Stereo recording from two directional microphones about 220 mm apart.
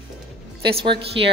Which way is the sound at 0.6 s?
20° right (ahead or behind).